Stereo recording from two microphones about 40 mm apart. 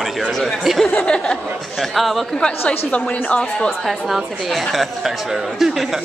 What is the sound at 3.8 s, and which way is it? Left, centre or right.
A woman's voice, centre.